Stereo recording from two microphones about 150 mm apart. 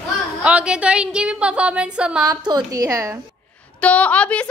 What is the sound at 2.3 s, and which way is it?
Speech, 25° right (ahead or behind).